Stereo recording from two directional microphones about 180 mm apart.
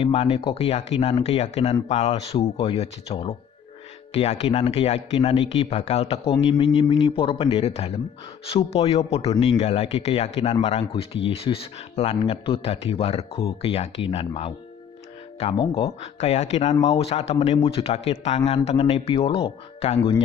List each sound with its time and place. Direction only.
0.0 s speech: 30° left (ahead or behind)
6.3 s speech: 25° left (ahead or behind)